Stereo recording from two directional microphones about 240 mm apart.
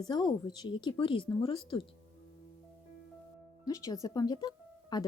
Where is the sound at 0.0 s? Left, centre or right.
Centre.